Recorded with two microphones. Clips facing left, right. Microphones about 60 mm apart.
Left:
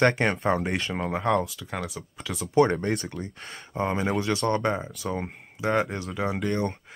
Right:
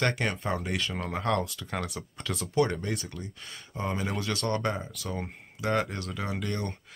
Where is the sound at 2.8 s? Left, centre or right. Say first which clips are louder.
Left 6 dB; left.